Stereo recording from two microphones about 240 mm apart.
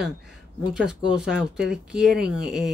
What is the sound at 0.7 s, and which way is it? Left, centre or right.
Speech, centre.